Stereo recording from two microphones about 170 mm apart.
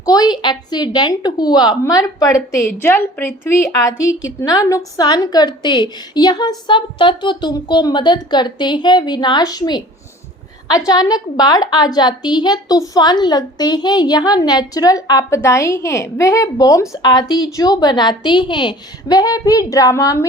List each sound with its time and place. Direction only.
0.0 s a woman's voice: 25° left (ahead or behind)